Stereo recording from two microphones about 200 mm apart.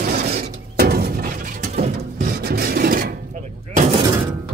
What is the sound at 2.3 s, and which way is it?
Rub, 50° right (ahead or behind).